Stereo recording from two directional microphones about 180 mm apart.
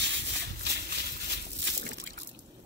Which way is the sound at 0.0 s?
75° right (ahead or behind).